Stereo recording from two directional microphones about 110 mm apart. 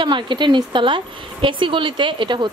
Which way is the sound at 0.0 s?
45° right (ahead or behind).